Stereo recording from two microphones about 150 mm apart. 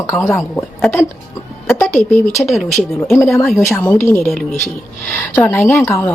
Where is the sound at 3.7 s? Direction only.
15° left (ahead or behind).